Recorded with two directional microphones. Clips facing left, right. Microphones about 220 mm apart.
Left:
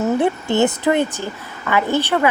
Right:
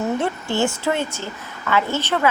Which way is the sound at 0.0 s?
20° left (ahead or behind).